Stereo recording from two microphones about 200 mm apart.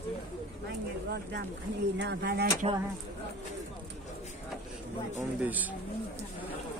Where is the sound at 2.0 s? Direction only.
55° right (ahead or behind).